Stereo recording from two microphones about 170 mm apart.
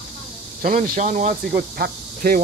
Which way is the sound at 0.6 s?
50° right (ahead or behind).